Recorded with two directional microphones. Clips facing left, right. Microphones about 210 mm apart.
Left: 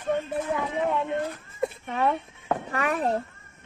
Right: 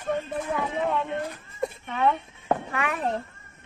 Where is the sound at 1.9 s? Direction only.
40° left (ahead or behind).